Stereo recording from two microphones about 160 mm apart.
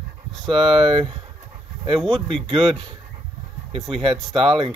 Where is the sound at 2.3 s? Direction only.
30° right (ahead or behind).